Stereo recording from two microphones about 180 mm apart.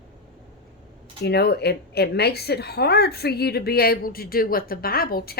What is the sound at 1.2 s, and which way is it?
A woman's voice, 65° left (ahead or behind).